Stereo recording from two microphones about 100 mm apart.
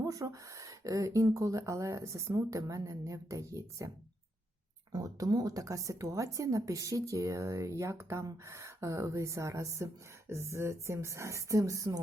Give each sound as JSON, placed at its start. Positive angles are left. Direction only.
{"t": 0.0, "sound": "speech", "side_deg": -35}